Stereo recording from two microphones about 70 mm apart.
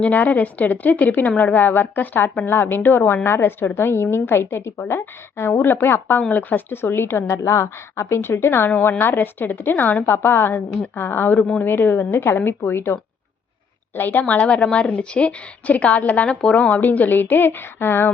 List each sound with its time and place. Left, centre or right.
0.0 s a woman's voice: left